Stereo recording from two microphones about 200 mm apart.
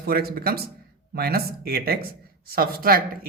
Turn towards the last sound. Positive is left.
turn(degrees=-45)  # may be behind; listen again after turning